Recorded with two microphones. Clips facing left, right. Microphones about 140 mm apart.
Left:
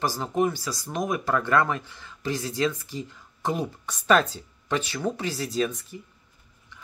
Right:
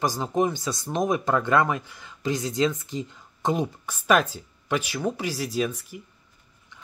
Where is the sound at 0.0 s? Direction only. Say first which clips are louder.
Right 1 dB; 15° right (ahead or behind).